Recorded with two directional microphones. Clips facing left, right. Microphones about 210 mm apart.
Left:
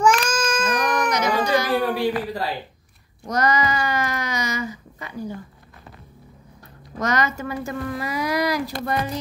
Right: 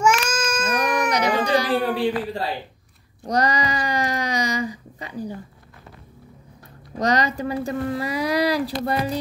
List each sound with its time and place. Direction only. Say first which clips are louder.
0.0 s cat: left 1 dB; 5° right (ahead or behind)
1.1 s baby cry: right 1 dB; 35° right (ahead or behind)
3.3 s speech: even; 35° right (ahead or behind)
7.0 s speech: right 2 dB; 35° right (ahead or behind)